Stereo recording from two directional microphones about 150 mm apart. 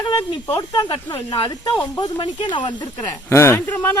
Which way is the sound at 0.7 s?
25° left (ahead or behind).